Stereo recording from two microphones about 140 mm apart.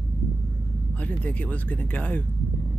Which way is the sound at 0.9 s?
10° left (ahead or behind).